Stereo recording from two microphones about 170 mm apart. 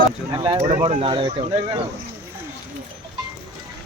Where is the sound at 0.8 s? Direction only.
35° right (ahead or behind).